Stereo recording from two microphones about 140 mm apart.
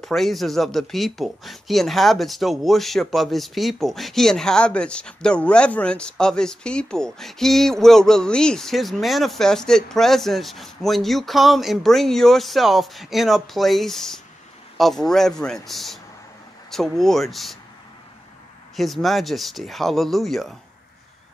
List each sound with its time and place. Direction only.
0.0 s speech: centre (ahead or behind)
18.8 s speech: centre (ahead or behind)